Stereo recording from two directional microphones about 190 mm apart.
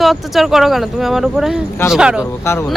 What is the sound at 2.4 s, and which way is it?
Speech, 15° left (ahead or behind).